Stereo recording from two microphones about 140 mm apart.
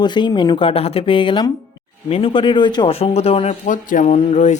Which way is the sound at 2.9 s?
45° left (ahead or behind).